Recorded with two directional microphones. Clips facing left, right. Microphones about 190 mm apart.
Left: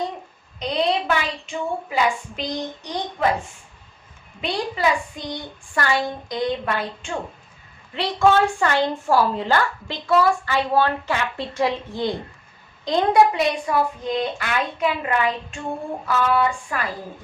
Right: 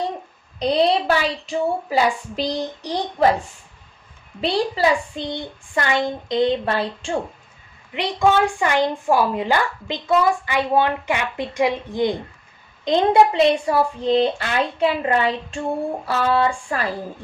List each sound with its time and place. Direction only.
0.6 s a woman's voice: 35° right (ahead or behind)
4.4 s a woman's voice: 30° right (ahead or behind)
7.9 s a woman's voice: 15° right (ahead or behind)